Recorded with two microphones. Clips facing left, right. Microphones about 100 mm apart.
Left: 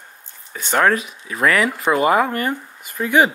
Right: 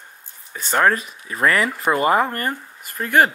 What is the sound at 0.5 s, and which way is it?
Speech, 5° right (ahead or behind).